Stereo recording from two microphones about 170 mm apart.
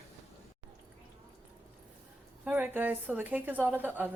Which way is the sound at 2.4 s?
10° right (ahead or behind).